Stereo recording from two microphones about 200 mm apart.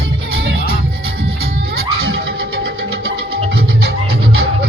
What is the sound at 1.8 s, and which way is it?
Music, 50° right (ahead or behind).